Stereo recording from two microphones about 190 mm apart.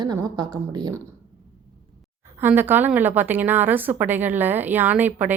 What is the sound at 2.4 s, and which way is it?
A woman's voice, 10° right (ahead or behind).